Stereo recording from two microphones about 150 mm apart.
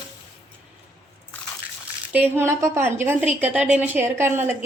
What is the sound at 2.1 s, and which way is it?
A woman's voice, 15° right (ahead or behind).